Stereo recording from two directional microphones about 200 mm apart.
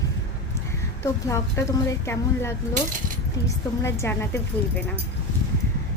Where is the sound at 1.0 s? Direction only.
15° left (ahead or behind).